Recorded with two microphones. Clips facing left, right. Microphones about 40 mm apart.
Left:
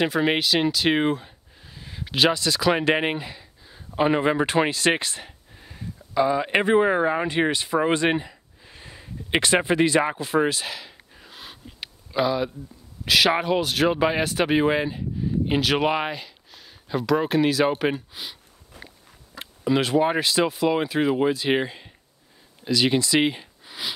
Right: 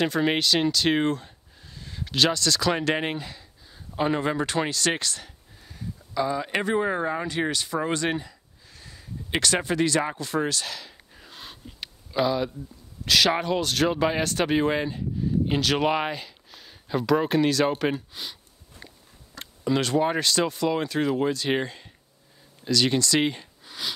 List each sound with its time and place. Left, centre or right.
0.0 s speech: centre